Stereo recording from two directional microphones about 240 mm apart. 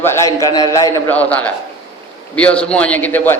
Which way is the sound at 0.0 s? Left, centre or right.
Centre.